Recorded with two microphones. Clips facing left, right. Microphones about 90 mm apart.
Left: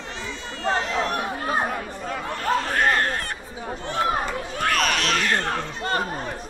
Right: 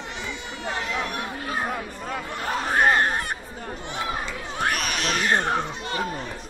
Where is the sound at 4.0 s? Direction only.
45° left (ahead or behind).